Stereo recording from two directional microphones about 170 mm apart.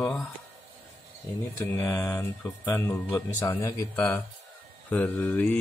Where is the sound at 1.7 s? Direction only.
15° left (ahead or behind).